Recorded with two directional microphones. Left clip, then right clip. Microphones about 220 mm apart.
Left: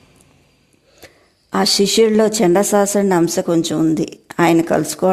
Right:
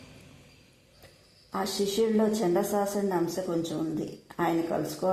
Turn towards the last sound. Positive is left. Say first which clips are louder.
# left 13 dB
turn(degrees=40)  # may be behind; listen again after turning